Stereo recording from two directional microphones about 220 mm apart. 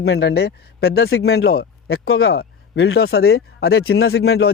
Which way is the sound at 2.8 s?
65° left (ahead or behind).